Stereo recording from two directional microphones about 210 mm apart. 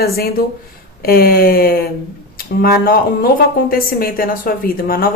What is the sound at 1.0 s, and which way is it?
Speech, 45° left (ahead or behind).